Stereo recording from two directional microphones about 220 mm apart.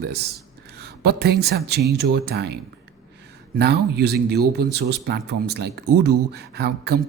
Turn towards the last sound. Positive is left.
turn(degrees=-45)  # may be behind; listen again after turning